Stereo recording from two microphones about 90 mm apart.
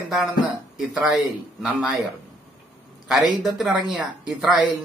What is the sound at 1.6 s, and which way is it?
Speech, 15° right (ahead or behind).